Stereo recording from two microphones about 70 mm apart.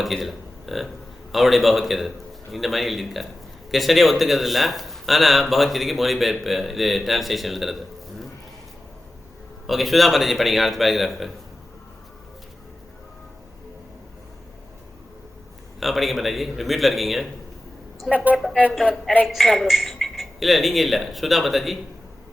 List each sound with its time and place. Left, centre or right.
0.0 s a man's voice: centre
9.6 s a man's voice: centre
15.8 s a man's voice: centre
18.1 s a woman's voice: right
19.3 s a man's voice: centre